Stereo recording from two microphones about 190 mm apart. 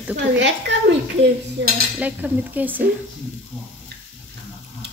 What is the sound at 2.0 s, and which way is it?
Speech, 10° right (ahead or behind).